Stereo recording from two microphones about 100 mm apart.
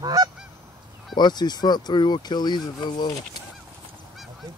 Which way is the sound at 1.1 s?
45° left (ahead or behind).